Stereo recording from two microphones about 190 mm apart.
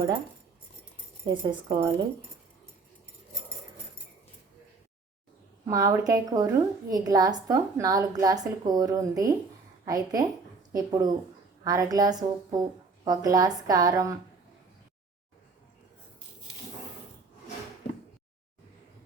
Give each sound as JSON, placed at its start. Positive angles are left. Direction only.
{"t": 1.3, "sound": "a woman's voice", "side_deg": -25}
{"t": 5.6, "sound": "a woman's voice", "side_deg": -15}